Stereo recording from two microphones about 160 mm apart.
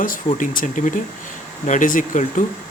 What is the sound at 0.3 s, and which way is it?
Speech, 55° left (ahead or behind).